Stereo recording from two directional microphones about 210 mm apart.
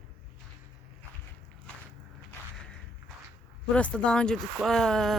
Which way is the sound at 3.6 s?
5° left (ahead or behind).